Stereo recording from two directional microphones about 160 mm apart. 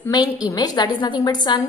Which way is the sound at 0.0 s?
25° left (ahead or behind).